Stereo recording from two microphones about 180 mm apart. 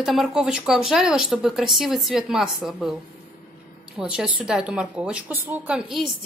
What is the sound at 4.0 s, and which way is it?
Speech, 5° right (ahead or behind).